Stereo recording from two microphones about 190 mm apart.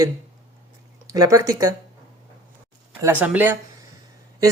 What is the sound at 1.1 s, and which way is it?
Speech, 20° right (ahead or behind).